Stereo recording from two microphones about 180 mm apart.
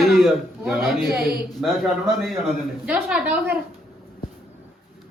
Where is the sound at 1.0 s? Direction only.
60° right (ahead or behind).